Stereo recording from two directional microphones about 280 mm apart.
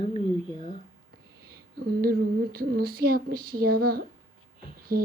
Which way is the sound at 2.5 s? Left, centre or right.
Right.